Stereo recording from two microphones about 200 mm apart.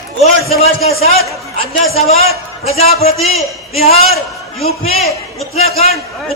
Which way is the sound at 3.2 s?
Centre (ahead or behind).